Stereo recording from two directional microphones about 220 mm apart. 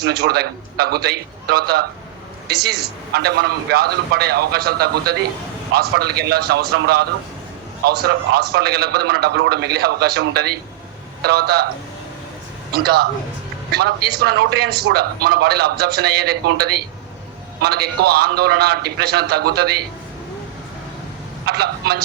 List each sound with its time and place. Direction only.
0.0 s a man's voice: 45° right (ahead or behind)
12.7 s a man's voice: 45° right (ahead or behind)
21.4 s a man's voice: 45° right (ahead or behind)